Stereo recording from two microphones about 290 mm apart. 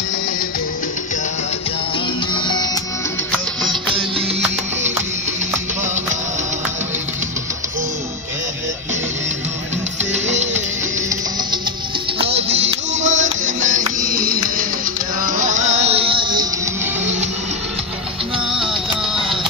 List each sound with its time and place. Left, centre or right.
2.3 s music: centre
10.1 s music: right
12.2 s music: right